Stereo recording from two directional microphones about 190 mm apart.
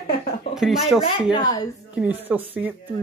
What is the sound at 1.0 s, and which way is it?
Speech, 20° left (ahead or behind).